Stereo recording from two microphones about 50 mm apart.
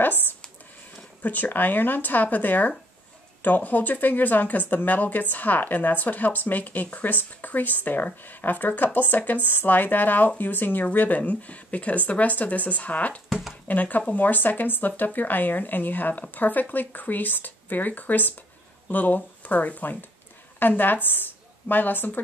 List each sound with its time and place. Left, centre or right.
0.0 s a sound: left
1.2 s speech: left
13.3 s speech: centre
13.7 s a woman's voice: left